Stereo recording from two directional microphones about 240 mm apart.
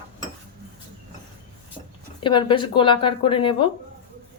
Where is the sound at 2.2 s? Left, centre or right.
Centre.